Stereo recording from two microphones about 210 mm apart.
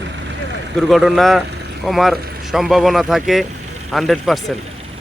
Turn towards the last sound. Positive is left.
turn(degrees=0)  # may be behind; listen again after turning